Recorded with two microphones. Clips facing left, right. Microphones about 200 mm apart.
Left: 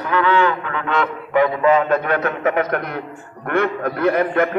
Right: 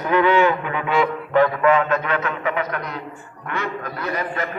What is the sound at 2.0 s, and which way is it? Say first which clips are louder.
A man's voice: left 4 dB; 50° left (ahead or behind).